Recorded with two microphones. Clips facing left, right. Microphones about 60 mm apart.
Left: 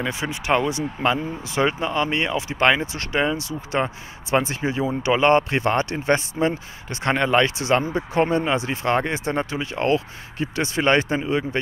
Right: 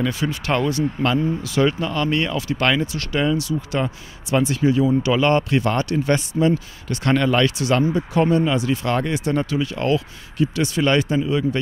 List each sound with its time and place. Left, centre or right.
0.0 s speech: left